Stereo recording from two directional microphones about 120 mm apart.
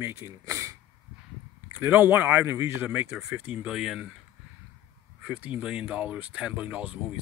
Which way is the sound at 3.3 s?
15° right (ahead or behind).